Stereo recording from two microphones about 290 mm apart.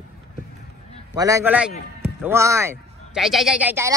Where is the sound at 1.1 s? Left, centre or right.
Centre.